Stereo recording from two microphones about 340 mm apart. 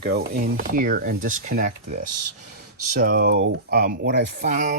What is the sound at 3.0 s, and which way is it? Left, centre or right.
Speech, right.